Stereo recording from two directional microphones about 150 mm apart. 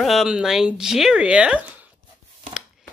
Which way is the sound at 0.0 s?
Centre (ahead or behind).